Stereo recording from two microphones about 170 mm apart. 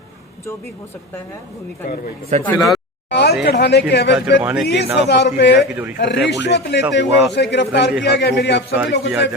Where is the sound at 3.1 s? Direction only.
80° left.